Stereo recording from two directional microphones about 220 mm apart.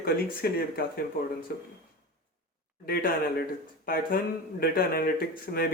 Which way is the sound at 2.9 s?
40° left (ahead or behind).